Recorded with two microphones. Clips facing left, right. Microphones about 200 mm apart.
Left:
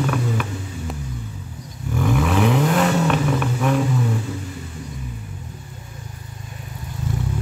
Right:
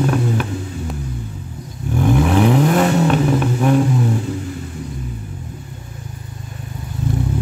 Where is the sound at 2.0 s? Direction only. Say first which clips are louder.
Right 4 dB; 30° right (ahead or behind).